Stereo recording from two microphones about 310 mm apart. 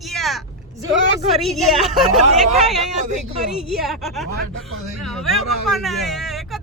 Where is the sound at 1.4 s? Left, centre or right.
Centre.